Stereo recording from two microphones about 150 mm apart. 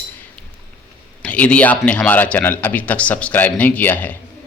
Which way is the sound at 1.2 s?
10° left (ahead or behind).